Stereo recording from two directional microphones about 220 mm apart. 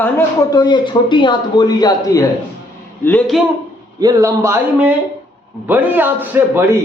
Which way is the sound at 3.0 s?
5° left (ahead or behind).